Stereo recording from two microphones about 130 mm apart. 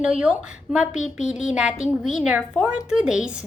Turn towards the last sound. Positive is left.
turn(degrees=-5)  # may be behind; listen again after turning